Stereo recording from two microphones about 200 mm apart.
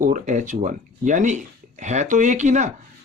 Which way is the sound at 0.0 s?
40° right (ahead or behind).